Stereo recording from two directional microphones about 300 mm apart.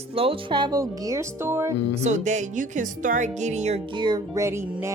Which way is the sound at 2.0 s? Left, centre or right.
Right.